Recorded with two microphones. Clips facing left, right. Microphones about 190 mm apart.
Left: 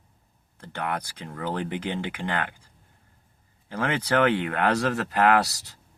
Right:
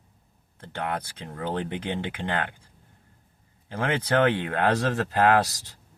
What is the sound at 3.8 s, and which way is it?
Speech, 20° right (ahead or behind).